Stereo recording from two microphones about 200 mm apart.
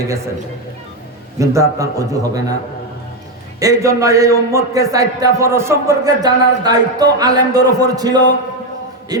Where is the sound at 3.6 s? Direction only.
15° right (ahead or behind).